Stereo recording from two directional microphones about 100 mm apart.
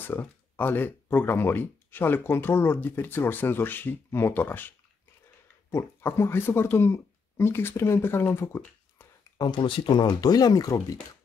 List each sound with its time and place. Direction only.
0.0 s speech: 20° left (ahead or behind)
9.4 s speech: 50° left (ahead or behind)